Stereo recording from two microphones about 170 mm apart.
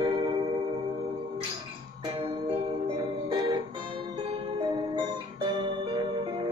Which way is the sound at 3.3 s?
25° right (ahead or behind).